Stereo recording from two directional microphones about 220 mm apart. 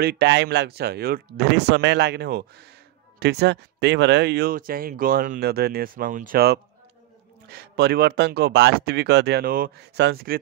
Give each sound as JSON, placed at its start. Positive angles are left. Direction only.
{"t": 0.0, "sound": "speech", "side_deg": -50}